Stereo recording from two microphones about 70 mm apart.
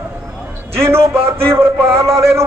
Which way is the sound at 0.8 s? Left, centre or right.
Right.